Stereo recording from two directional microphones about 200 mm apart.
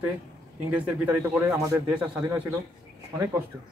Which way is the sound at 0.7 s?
10° right (ahead or behind).